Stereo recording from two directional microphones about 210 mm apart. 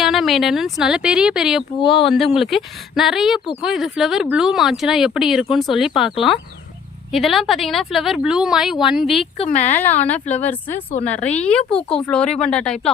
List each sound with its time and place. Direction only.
0.0 s speech: centre (ahead or behind)
9.1 s speech: 30° left (ahead or behind)
9.7 s a woman's voice: 10° left (ahead or behind)